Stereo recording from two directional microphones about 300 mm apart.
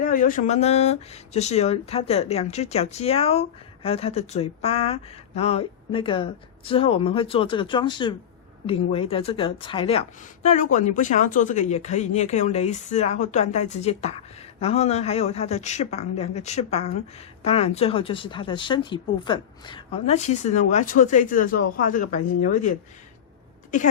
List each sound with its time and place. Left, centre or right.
0.0 s speech: left